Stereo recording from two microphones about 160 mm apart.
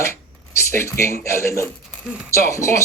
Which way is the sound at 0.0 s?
15° left (ahead or behind).